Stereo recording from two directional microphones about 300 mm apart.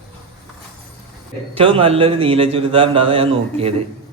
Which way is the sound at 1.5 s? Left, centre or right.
Centre.